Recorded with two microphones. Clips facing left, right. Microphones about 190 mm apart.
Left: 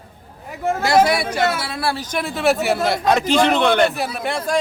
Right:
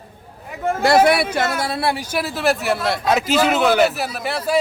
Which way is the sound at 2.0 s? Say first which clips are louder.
Left 1 dB; 5° right (ahead or behind).